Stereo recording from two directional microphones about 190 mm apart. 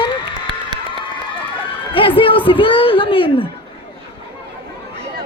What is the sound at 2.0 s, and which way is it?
A woman's voice, 25° left (ahead or behind).